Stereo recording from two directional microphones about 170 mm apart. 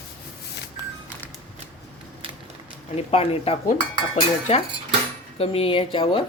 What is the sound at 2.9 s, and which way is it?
Cutlery, 35° left (ahead or behind).